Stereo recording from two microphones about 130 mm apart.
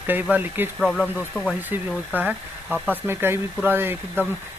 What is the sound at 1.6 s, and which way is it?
Speech, 15° right (ahead or behind).